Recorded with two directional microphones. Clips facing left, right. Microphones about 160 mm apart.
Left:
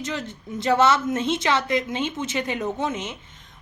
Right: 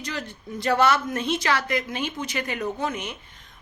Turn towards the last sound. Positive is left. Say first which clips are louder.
# left 2 dB
turn(degrees=20)  # may be behind; listen again after turning